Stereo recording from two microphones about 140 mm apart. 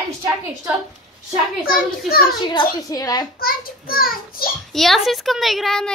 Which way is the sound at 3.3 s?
90° left.